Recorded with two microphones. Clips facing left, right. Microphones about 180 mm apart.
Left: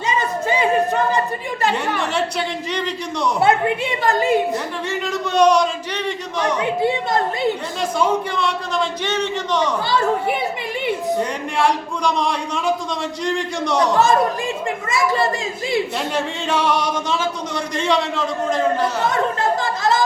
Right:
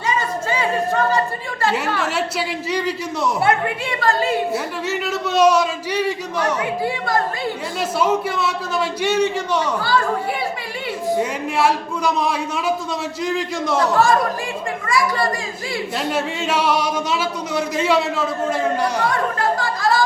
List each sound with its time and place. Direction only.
0.2 s a sound: 20° left (ahead or behind)
2.0 s a man's voice: 5° right (ahead or behind)
3.4 s a woman's voice: 20° left (ahead or behind)
4.5 s a man's voice: 5° right (ahead or behind)
6.6 s a woman's voice: 20° left (ahead or behind)
7.8 s speech: 5° right (ahead or behind)
9.8 s a woman's voice: 20° left (ahead or behind)
11.2 s a man's voice: 5° right (ahead or behind)
13.9 s a woman's voice: 20° left (ahead or behind)
14.8 s children playing: 25° left (ahead or behind)
16.1 s speech: 10° right (ahead or behind)
19.0 s chatter: 20° left (ahead or behind)